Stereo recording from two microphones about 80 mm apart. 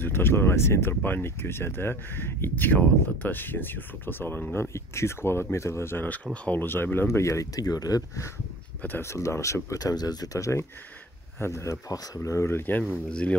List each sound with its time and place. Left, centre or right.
0.0 s speech: left
4.7 s speech: left; by 6.6 s centre
6.6 s speech: left
9.0 s speech: left; by 13.4 s centre